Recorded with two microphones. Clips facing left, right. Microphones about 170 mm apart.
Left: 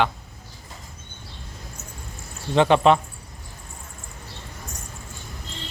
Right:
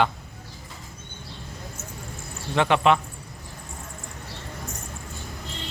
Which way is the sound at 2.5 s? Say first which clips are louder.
Left 3 dB; 30° left (ahead or behind).